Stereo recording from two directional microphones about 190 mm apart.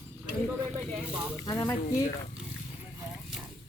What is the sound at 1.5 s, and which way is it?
Speech, 20° left (ahead or behind).